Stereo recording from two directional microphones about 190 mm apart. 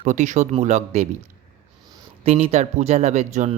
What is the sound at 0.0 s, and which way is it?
Speech, 40° right (ahead or behind).